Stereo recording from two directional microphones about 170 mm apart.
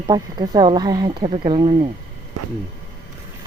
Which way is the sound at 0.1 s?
25° right (ahead or behind).